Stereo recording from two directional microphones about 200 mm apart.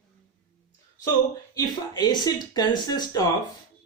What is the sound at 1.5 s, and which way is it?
Speech, 20° left (ahead or behind).